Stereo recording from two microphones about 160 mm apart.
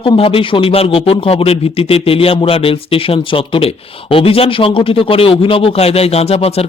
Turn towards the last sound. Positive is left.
turn(degrees=40)  # may be behind; listen again after turning